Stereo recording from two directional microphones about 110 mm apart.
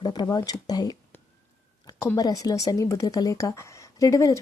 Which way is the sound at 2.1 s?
35° left (ahead or behind).